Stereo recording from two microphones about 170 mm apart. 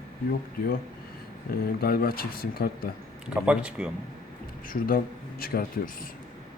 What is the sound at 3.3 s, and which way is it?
Speech, 5° right (ahead or behind).